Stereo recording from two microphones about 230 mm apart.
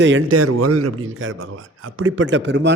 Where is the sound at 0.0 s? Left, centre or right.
Right.